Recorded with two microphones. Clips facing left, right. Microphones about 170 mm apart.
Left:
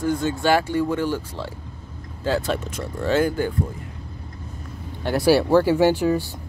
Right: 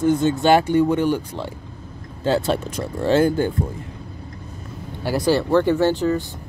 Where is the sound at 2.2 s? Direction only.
30° right (ahead or behind).